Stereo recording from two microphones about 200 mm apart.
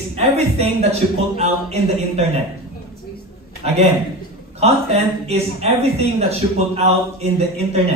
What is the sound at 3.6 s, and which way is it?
A man's voice, 30° right (ahead or behind).